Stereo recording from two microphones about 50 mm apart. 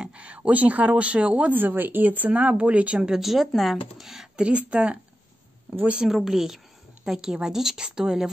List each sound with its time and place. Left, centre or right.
0.0 s a sound: right
0.5 s speech: right
1.5 s a woman's voice: right
3.1 s speech: centre
4.4 s speech: right
6.0 s a woman's voice: centre